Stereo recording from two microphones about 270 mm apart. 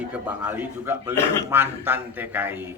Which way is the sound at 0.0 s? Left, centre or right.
Centre.